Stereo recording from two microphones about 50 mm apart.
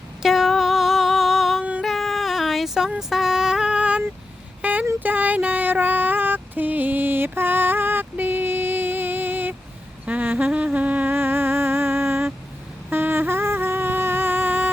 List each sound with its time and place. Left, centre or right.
0.2 s a sound: centre
4.6 s a sound: right
4.9 s female singing: right
10.1 s humming: right
11.1 s music: right
12.9 s humming: right